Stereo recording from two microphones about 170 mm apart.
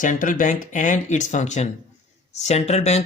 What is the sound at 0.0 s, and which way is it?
Speech, 50° left (ahead or behind).